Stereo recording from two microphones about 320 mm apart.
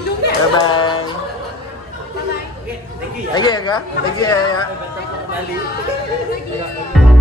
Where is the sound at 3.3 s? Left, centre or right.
Centre.